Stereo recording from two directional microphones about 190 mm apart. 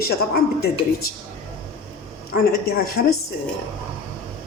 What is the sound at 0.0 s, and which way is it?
Speech, 55° left (ahead or behind).